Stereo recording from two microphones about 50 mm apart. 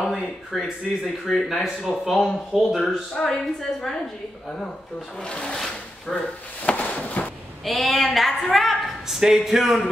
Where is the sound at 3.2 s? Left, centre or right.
Centre.